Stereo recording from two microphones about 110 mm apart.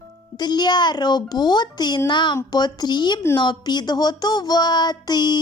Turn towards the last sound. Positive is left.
turn(degrees=40)  # may be behind; listen again after turning